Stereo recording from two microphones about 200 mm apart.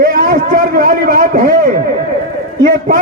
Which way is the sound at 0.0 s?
40° right (ahead or behind).